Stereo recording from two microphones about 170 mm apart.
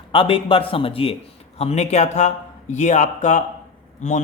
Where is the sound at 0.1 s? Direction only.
30° left (ahead or behind).